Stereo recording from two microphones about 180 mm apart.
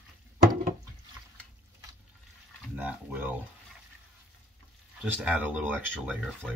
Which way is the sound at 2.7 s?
10° right (ahead or behind).